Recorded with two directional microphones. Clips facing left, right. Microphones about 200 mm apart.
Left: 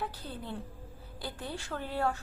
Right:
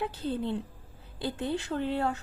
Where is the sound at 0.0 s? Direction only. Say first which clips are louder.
Right 8 dB; 25° right (ahead or behind).